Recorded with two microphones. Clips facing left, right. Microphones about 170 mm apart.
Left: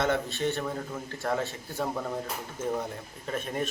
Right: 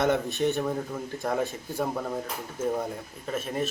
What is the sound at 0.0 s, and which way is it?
A man's voice, 20° right (ahead or behind).